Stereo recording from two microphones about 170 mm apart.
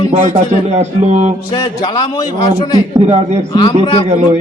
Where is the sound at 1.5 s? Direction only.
25° left (ahead or behind).